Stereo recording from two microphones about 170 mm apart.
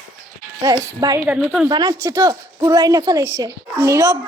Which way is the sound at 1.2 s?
10° right (ahead or behind).